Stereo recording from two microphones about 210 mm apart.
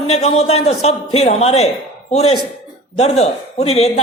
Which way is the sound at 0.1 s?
30° left (ahead or behind).